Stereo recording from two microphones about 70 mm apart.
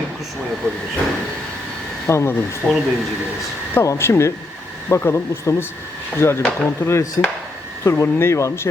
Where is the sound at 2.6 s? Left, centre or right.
Left.